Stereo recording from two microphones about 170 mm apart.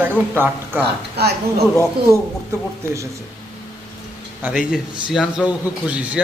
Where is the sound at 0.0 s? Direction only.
10° right (ahead or behind).